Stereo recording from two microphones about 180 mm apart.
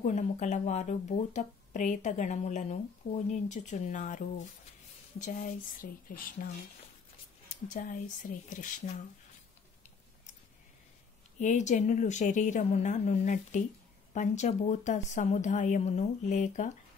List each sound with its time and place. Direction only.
0.0 s a woman's voice: 40° left (ahead or behind)
7.6 s a woman's voice: 45° left (ahead or behind)
11.3 s a woman's voice: 40° left (ahead or behind)